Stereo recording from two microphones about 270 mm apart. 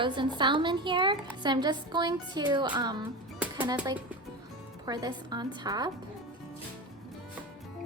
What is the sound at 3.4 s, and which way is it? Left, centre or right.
Music, centre.